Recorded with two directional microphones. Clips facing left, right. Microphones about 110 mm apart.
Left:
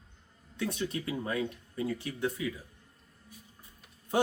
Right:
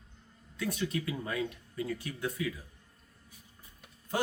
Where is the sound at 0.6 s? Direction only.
25° left (ahead or behind).